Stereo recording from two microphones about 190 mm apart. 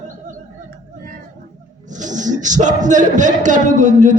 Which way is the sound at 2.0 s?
40° right (ahead or behind).